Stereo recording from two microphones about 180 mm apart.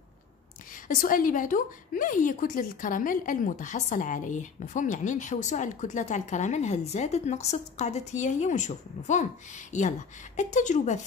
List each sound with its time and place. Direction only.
0.8 s a woman's voice: 50° left (ahead or behind)